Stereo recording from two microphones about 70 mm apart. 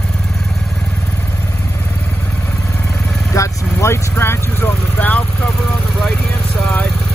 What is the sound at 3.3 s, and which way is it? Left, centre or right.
Vehicle, left.